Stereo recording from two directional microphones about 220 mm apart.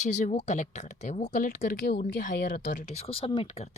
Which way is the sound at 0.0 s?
30° left (ahead or behind).